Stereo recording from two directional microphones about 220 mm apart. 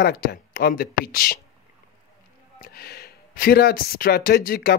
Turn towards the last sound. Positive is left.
turn(degrees=40)  # may be behind; listen again after turning